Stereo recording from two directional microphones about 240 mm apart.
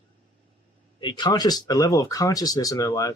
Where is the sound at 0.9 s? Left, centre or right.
Centre.